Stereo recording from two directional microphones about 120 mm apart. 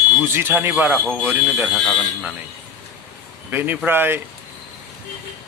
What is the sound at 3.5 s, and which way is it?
Speech, 15° right (ahead or behind).